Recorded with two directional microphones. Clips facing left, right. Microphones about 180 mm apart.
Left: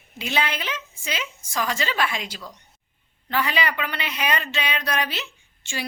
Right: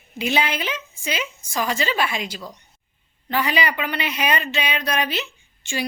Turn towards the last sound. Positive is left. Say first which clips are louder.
# right 6 dB
turn(degrees=0)  # may be behind; listen again after turning